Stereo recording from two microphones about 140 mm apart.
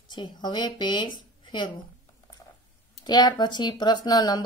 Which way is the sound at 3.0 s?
30° left (ahead or behind).